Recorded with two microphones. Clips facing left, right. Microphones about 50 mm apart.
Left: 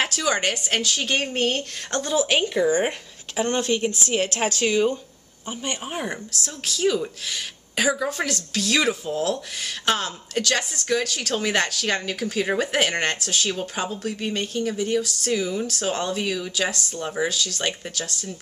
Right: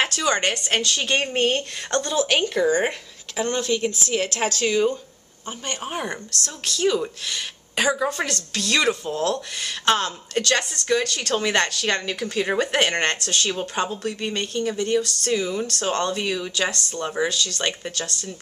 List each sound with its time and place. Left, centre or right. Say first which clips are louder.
0.1 s a woman's voice: right 1 dB; centre
3.4 s speech: even; left
4.2 s speech: even; left
6.0 s a woman's voice: right 1 dB; centre
10.4 s speech: right 1 dB; centre
10.7 s a woman's voice: right 2 dB; centre